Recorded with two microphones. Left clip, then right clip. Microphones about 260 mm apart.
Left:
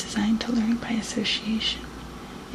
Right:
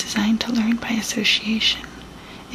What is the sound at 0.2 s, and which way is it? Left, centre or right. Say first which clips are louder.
Speech: right 3 dB; centre.